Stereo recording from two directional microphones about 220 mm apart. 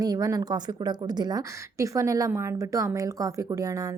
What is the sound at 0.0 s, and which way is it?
A woman's voice, 15° right (ahead or behind).